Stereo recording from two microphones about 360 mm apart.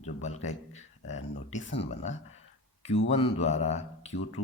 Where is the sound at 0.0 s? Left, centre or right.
Centre.